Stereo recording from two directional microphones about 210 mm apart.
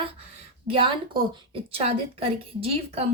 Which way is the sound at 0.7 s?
25° right (ahead or behind).